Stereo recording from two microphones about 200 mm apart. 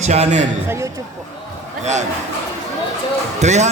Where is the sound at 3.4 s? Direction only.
35° right (ahead or behind).